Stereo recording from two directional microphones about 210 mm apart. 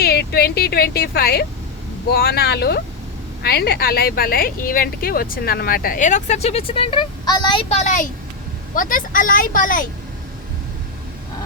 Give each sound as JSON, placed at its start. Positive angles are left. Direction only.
{"t": 0.0, "sound": "a woman's voice", "side_deg": 50}